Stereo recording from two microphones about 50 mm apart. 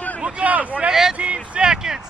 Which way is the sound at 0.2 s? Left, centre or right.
Right.